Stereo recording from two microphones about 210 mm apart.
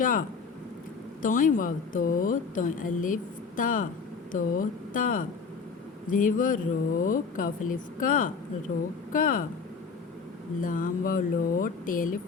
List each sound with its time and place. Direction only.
0.0 s speech: 40° left (ahead or behind)
10.6 s speech: 40° left (ahead or behind)